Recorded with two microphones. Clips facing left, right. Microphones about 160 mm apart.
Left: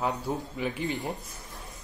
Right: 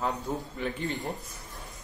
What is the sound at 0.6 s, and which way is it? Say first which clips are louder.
Speech: left 1 dB; 10° left (ahead or behind).